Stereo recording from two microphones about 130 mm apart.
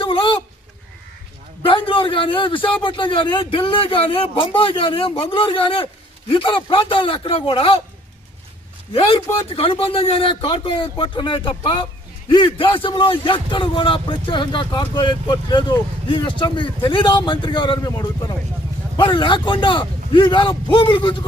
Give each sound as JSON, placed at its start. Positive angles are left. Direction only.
{"t": 0.0, "sound": "a sound", "side_deg": 40}
{"t": 1.6, "sound": "a man's voice", "side_deg": 40}
{"t": 8.9, "sound": "a man's voice", "side_deg": 45}